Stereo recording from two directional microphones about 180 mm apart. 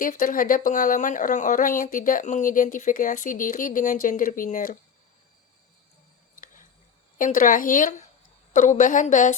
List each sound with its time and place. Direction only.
0.0 s speech: 50° left (ahead or behind)
7.2 s speech: 50° left (ahead or behind)